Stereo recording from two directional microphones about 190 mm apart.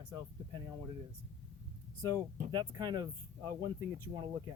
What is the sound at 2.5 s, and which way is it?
Speech, 20° right (ahead or behind).